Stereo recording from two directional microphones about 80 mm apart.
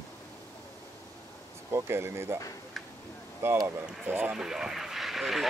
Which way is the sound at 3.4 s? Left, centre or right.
Right.